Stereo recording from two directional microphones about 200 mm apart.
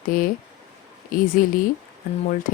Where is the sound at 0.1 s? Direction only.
45° left (ahead or behind).